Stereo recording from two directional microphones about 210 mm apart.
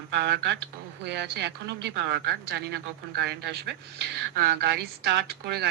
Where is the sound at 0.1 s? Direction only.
55° right (ahead or behind).